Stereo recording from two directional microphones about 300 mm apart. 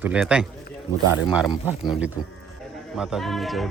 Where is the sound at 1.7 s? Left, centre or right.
Centre.